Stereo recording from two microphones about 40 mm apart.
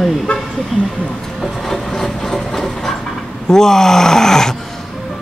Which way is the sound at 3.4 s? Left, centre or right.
Centre.